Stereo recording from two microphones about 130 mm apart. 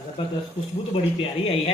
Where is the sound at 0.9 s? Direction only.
45° left (ahead or behind).